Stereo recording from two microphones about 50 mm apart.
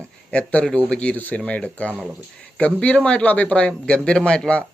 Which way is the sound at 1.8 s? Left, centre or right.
Left.